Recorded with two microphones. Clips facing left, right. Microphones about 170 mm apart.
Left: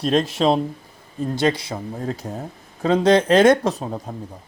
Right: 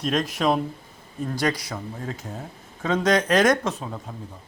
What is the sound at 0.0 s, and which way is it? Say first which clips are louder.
Speech: left 5 dB; 30° left (ahead or behind).